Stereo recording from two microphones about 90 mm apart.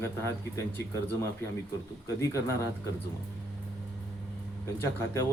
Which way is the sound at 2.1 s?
35° left (ahead or behind).